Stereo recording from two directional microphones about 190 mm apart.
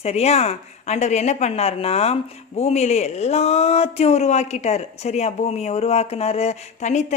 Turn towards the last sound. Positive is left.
turn(degrees=35)  # may be behind; listen again after turning